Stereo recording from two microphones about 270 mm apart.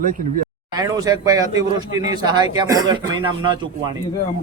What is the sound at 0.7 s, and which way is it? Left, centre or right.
A man's voice, centre.